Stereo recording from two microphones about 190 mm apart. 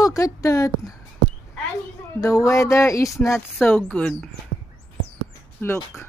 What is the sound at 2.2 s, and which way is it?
Speech, 15° left (ahead or behind).